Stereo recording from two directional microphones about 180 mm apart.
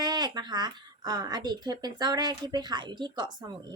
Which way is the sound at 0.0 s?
20° right (ahead or behind).